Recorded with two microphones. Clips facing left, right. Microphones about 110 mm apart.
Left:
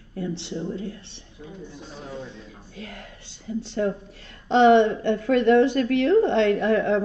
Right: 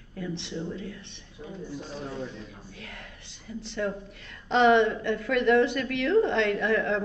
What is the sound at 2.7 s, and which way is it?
A woman's voice, 35° left (ahead or behind).